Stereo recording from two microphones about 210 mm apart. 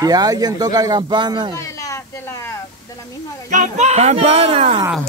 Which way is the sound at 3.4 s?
35° right (ahead or behind).